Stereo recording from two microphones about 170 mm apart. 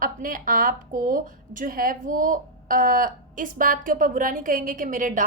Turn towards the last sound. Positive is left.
turn(degrees=-50)  # may be behind; listen again after turning